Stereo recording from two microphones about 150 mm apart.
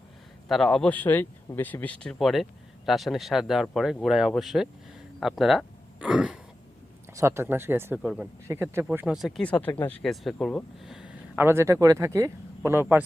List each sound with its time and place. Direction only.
0.4 s speech: centre (ahead or behind)
7.1 s speech: 20° right (ahead or behind)
8.4 s speech: 15° right (ahead or behind); by 10.0 s 10° left (ahead or behind)
10.0 s speech: centre (ahead or behind); by 13.0 s 15° right (ahead or behind)